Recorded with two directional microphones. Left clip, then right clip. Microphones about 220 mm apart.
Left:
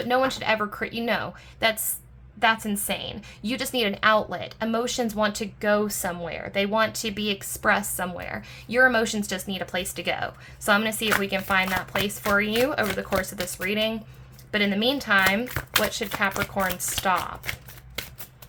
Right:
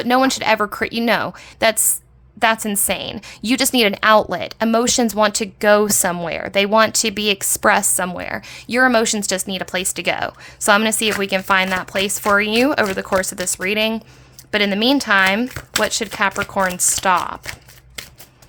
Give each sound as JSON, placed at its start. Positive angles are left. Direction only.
{"t": 0.0, "sound": "a woman's voice", "side_deg": -45}